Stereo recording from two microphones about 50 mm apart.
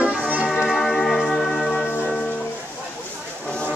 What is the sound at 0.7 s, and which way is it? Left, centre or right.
Music, centre.